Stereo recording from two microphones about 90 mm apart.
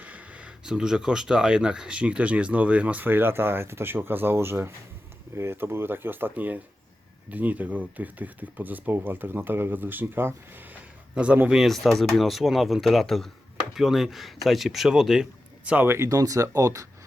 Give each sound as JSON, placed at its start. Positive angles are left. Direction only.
{"t": 0.0, "sound": "speech", "side_deg": -15}
{"t": 11.1, "sound": "speech", "side_deg": -15}
{"t": 15.7, "sound": "speech", "side_deg": -25}
{"t": 16.0, "sound": "speech", "side_deg": -40}